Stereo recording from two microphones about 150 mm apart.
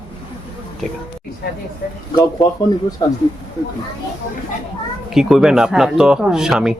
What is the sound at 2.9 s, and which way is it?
Speech, 20° left (ahead or behind).